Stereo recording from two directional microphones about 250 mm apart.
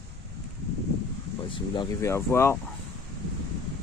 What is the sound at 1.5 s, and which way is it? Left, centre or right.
Speech, centre.